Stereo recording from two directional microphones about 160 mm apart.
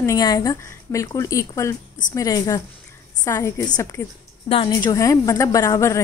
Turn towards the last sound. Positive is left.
turn(degrees=20)  # may be behind; listen again after turning